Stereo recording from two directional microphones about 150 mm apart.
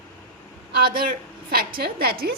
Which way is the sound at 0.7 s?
70° right (ahead or behind).